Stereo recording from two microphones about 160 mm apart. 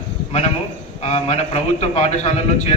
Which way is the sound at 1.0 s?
45° left (ahead or behind).